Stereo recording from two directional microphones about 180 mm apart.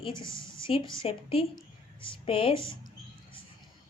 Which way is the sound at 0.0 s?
25° left (ahead or behind).